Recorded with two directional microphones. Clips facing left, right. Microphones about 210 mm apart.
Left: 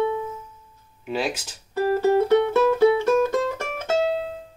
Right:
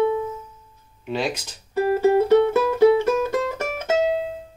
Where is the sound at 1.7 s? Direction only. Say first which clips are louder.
Right 2 dB; 10° right (ahead or behind).